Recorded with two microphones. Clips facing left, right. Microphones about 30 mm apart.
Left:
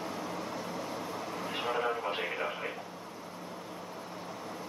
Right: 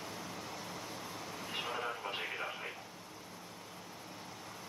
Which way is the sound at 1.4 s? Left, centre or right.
Centre.